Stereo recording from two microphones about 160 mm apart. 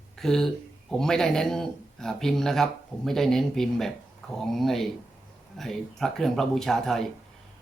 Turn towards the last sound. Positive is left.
turn(degrees=0)  # may be behind; listen again after turning